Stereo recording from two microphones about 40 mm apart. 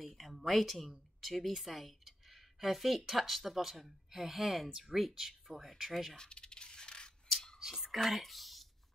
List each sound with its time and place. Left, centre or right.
0.0 s speech: centre
6.1 s coin: left
7.5 s whispering: centre